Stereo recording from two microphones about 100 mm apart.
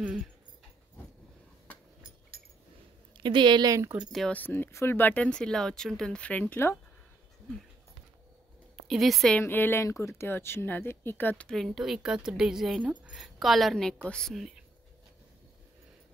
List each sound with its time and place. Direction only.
3.2 s a woman's voice: 50° right (ahead or behind)
3.9 s speech: 10° right (ahead or behind)
4.3 s speech: 20° left (ahead or behind)
8.7 s speech: centre (ahead or behind)
9.4 s speech: 20° left (ahead or behind)
11.5 s a woman's voice: centre (ahead or behind)
13.1 s speech: centre (ahead or behind)